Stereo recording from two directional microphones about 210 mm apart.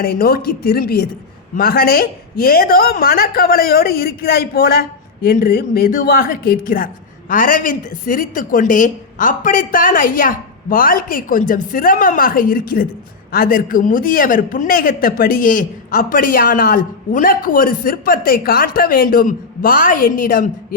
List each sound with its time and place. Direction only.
0.0 s a woman's voice: 45° left (ahead or behind)